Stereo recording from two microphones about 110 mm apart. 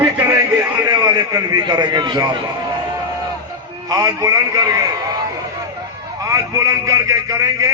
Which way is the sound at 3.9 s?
35° right (ahead or behind).